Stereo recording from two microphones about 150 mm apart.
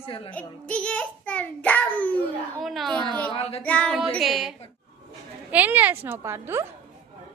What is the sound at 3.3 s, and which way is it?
Speech, 40° left (ahead or behind).